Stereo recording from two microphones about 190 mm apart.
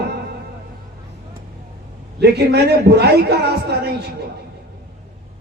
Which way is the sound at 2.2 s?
60° right (ahead or behind).